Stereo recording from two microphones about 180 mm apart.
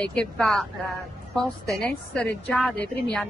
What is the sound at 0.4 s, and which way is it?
Speech, centre (ahead or behind).